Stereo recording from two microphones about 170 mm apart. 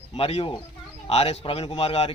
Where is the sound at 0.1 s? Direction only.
40° left (ahead or behind).